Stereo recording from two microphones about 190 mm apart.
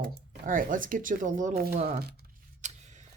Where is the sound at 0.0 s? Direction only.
50° right (ahead or behind).